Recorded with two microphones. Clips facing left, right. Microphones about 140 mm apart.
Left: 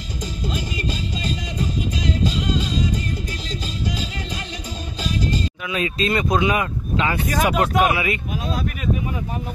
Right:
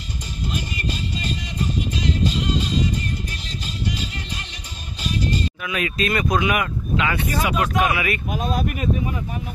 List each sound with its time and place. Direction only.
5.7 s speech: 25° left (ahead or behind)